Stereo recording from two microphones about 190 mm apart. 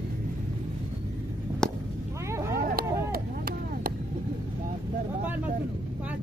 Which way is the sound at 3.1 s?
50° right (ahead or behind).